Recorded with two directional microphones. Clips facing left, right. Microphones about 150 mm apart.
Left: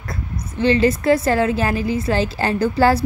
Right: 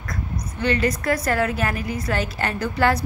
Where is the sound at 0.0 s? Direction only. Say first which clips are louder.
Left 1 dB; 30° left (ahead or behind).